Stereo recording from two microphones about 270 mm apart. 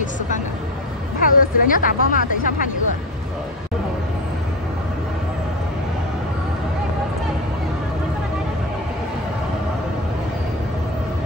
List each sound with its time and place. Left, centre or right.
1.2 s speech: left